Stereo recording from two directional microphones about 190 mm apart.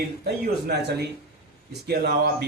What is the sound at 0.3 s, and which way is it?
Speech, 60° right (ahead or behind).